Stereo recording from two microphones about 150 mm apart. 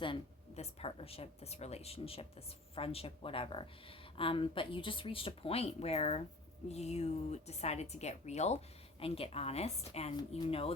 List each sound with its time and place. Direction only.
0.0 s a woman's voice: 40° left (ahead or behind)